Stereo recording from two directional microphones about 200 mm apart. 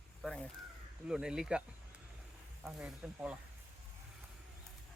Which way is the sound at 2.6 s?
5° right (ahead or behind).